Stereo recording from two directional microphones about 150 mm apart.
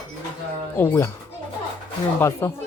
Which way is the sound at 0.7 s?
15° left (ahead or behind).